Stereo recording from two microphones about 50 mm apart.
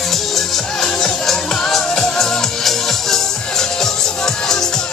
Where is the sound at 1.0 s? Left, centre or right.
Centre.